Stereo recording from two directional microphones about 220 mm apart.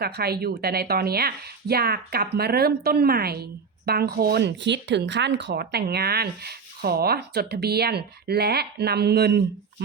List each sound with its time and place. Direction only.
0.0 s speech: 45° right (ahead or behind)